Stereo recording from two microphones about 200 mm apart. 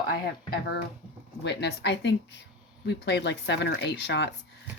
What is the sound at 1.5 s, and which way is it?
Speech, 60° left (ahead or behind).